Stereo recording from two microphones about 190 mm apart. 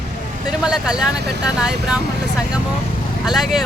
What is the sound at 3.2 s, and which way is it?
Speech, centre (ahead or behind).